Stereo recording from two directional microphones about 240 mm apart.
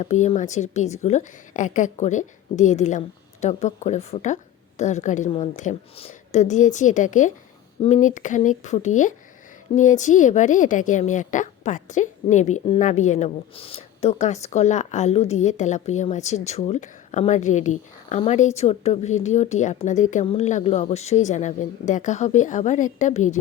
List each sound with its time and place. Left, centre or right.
0.0 s a woman's voice: left